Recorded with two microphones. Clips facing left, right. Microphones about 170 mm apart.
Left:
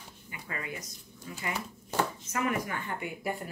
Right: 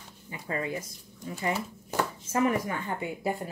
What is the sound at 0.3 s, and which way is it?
Speech, 30° right (ahead or behind).